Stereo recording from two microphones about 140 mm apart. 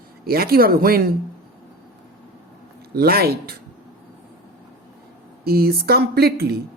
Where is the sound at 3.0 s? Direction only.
90° right.